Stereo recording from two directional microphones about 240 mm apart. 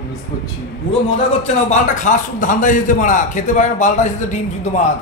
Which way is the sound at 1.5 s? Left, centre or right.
Left.